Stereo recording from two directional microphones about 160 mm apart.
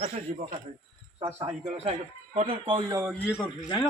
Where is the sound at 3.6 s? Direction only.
30° left (ahead or behind).